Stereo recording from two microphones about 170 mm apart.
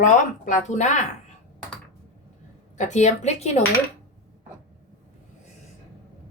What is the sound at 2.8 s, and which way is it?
Speech, 45° left (ahead or behind).